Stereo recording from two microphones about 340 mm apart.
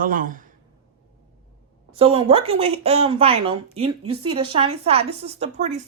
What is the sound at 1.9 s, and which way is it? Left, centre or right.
Speech, centre.